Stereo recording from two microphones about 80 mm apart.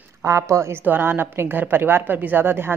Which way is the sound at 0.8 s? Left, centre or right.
Right.